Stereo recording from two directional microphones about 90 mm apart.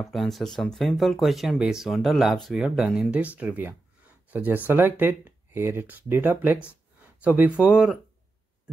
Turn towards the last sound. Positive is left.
turn(degrees=-15)  # may be behind; listen again after turning